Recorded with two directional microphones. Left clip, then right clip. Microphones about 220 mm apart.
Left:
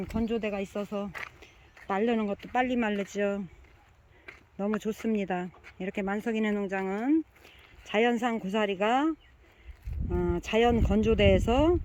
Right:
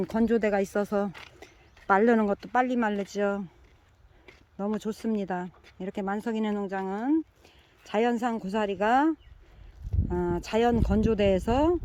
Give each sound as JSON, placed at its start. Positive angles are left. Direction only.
{"t": 0.0, "sound": "speech", "side_deg": -20}
{"t": 4.3, "sound": "a sound", "side_deg": 0}
{"t": 4.8, "sound": "speech", "side_deg": 0}
{"t": 10.2, "sound": "speech", "side_deg": -5}